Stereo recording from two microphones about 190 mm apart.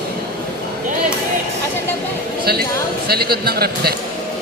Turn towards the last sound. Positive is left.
turn(degrees=-55)  # may be behind; listen again after turning